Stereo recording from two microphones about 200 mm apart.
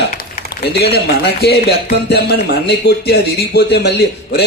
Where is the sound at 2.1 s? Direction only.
55° left (ahead or behind).